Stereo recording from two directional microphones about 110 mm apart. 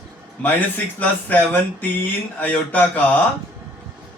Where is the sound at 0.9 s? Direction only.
15° left (ahead or behind).